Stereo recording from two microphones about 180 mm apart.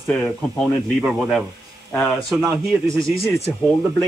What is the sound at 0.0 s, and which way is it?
Speech, 5° left (ahead or behind).